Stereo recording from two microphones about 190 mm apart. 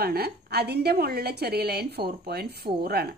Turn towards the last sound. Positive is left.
turn(degrees=-55)  # may be behind; listen again after turning